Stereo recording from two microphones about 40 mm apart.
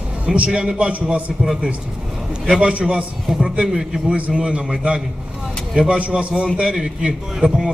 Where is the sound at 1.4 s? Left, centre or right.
Centre.